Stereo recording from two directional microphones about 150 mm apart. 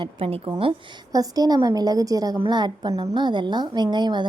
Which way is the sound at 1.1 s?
25° right (ahead or behind).